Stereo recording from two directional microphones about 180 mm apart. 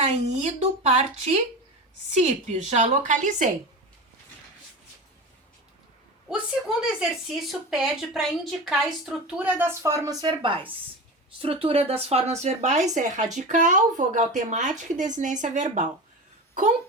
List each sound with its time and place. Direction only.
0.0 s a woman's voice: 35° right (ahead or behind)
6.3 s a woman's voice: 5° right (ahead or behind); by 15.9 s 45° right (ahead or behind)